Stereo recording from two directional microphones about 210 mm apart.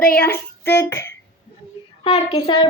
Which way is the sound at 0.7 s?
55° left (ahead or behind).